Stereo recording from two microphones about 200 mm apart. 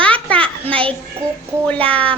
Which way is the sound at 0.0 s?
5° left (ahead or behind).